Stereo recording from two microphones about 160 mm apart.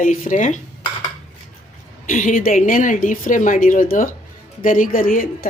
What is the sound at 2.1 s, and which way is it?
Speech, 55° left (ahead or behind).